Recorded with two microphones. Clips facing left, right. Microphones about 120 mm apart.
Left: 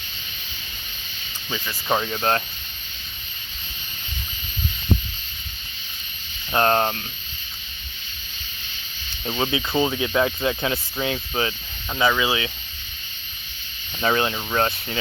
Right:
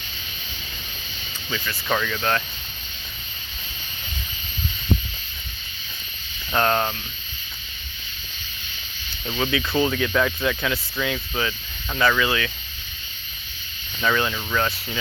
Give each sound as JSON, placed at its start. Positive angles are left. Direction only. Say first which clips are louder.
{"t": 1.5, "sound": "speech", "louder": "left 1 dB", "side_deg": 20}
{"t": 2.0, "sound": "speech", "louder": "left 1 dB", "side_deg": 30}
{"t": 6.5, "sound": "speech", "louder": "left 2 dB", "side_deg": 35}
{"t": 9.2, "sound": "speech", "louder": "even", "side_deg": 25}
{"t": 11.9, "sound": "speech", "louder": "even", "side_deg": 15}
{"t": 14.0, "sound": "speech", "louder": "left 1 dB", "side_deg": 35}